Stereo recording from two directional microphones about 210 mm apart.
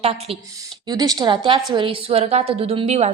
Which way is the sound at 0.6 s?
20° right (ahead or behind).